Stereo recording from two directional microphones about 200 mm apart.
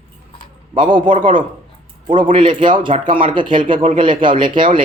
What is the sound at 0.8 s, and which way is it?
Speech, 25° right (ahead or behind).